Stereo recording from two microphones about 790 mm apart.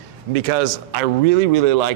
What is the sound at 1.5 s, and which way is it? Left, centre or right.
Speech, right.